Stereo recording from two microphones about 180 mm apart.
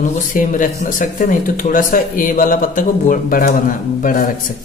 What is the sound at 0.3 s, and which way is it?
Speech, 45° left (ahead or behind).